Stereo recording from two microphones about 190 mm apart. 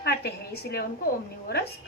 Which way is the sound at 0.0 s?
55° left (ahead or behind).